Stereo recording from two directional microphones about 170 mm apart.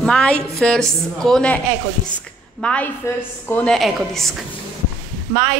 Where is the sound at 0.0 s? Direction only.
5° left (ahead or behind).